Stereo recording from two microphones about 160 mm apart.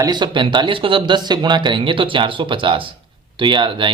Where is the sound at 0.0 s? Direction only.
25° right (ahead or behind).